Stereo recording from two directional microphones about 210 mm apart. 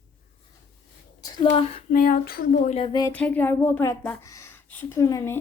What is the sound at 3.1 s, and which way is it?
A woman's voice, 5° left (ahead or behind).